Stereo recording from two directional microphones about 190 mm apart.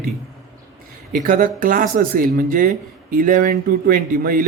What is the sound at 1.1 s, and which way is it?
Speech, 45° right (ahead or behind).